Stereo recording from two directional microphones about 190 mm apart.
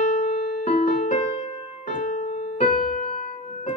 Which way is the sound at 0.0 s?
40° left (ahead or behind).